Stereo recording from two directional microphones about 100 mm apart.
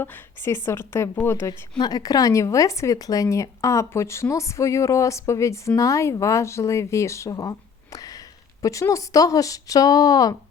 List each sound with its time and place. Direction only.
0.0 s speech: 25° left (ahead or behind)
1.8 s speech: 40° left (ahead or behind)
7.9 s sniff: 40° left (ahead or behind)
8.6 s speech: 35° left (ahead or behind)